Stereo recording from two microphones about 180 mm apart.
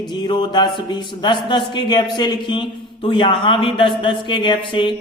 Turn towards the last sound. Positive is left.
turn(degrees=30)  # may be behind; listen again after turning